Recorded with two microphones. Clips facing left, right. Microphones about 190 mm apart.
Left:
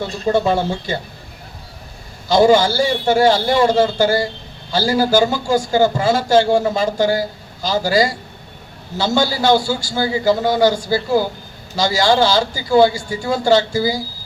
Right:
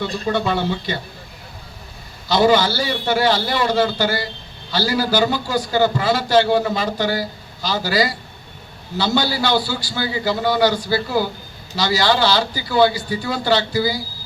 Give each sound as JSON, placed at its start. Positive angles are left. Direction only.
{"t": 0.0, "sound": "a man's voice", "side_deg": 40}
{"t": 2.3, "sound": "a man's voice", "side_deg": 45}